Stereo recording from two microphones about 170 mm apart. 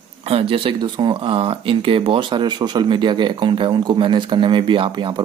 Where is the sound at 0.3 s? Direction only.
35° right (ahead or behind).